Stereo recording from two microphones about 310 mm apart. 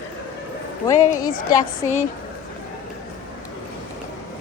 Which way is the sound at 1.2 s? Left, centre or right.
Centre.